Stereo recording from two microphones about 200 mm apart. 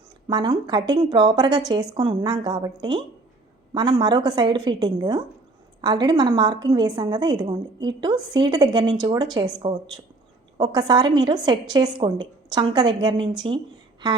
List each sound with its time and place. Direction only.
0.3 s a woman's voice: 25° right (ahead or behind)